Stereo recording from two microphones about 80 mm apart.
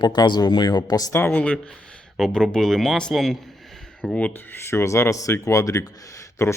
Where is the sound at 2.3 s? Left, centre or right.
Centre.